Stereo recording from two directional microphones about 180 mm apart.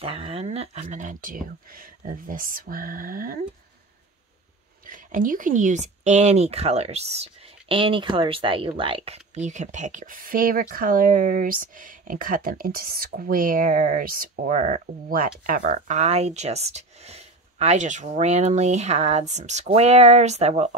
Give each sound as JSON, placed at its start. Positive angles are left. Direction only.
{"t": 0.0, "sound": "speech", "side_deg": -30}
{"t": 4.8, "sound": "speech", "side_deg": -50}